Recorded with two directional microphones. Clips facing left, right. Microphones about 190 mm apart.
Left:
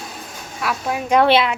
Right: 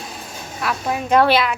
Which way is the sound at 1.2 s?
25° left (ahead or behind).